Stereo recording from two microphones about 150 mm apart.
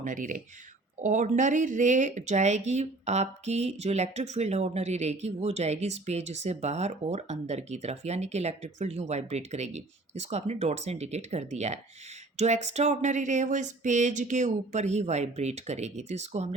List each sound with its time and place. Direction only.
0.0 s speech: 60° right (ahead or behind)